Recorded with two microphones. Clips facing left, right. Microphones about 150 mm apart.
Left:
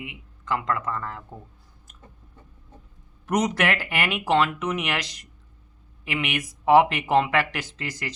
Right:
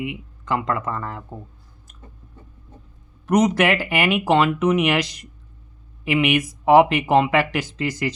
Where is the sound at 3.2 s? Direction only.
5° left (ahead or behind).